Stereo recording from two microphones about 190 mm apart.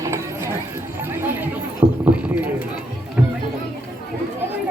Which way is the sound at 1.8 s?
20° right (ahead or behind).